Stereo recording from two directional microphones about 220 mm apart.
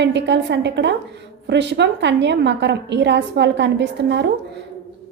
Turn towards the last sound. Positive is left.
turn(degrees=-50)  # may be behind; listen again after turning